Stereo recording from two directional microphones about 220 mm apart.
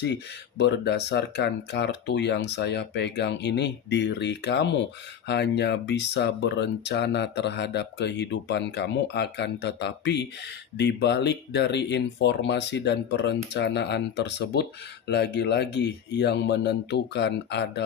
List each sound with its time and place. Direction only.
0.0 s speech: 50° left (ahead or behind)